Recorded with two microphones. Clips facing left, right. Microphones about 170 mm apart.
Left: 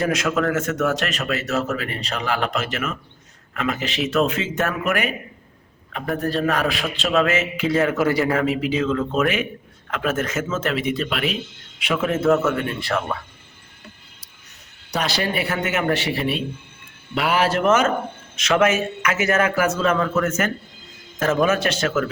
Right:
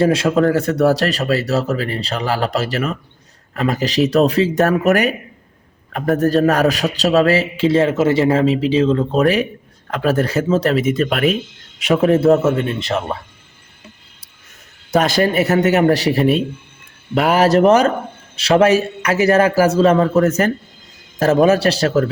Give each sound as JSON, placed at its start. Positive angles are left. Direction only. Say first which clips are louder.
{"t": 0.0, "sound": "a man's voice", "louder": "right 7 dB", "side_deg": -30}
{"t": 14.9, "sound": "a man's voice", "louder": "right 9 dB", "side_deg": -50}